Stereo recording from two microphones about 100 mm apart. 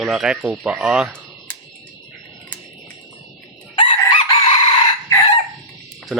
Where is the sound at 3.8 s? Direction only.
60° left (ahead or behind).